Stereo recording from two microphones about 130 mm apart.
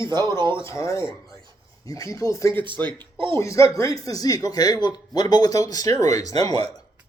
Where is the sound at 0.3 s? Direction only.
35° right (ahead or behind).